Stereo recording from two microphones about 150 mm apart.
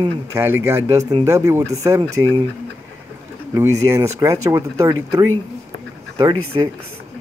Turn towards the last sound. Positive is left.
turn(degrees=-25)  # may be behind; listen again after turning